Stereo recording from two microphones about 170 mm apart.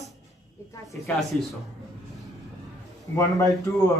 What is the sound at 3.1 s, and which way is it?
Speech, 20° left (ahead or behind).